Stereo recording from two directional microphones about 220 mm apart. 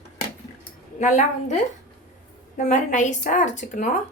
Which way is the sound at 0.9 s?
35° left (ahead or behind).